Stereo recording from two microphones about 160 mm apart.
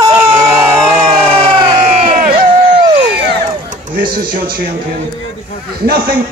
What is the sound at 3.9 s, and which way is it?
Speech, 65° right (ahead or behind).